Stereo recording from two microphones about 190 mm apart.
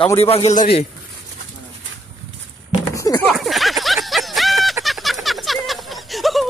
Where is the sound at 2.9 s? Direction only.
15° left (ahead or behind).